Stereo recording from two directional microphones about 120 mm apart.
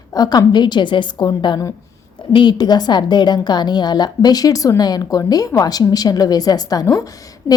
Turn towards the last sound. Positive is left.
turn(degrees=30)  # may be behind; listen again after turning